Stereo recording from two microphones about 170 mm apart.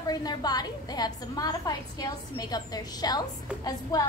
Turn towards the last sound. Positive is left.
turn(degrees=20)  # may be behind; listen again after turning